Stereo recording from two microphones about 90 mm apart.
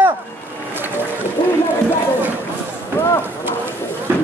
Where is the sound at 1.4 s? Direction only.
60° left (ahead or behind).